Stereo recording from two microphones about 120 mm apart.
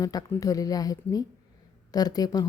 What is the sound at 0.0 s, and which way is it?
A woman's voice, 30° left (ahead or behind).